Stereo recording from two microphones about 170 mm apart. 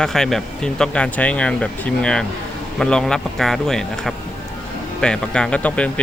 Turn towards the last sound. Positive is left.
turn(degrees=5)  # may be behind; listen again after turning